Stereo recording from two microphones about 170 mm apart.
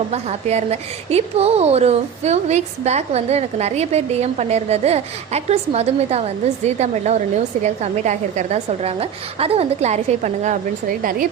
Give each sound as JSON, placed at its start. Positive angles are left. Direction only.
{"t": 0.1, "sound": "a woman's voice", "side_deg": -40}
{"t": 11.0, "sound": "speech", "side_deg": -55}